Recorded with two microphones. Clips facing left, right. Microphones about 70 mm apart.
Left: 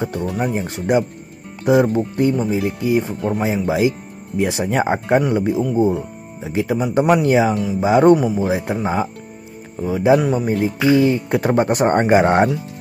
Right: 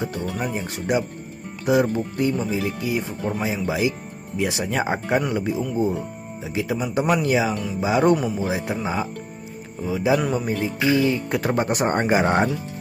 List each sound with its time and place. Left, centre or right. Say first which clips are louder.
0.2 s speech: left 5 dB; left
6.4 s speech: left 5 dB; left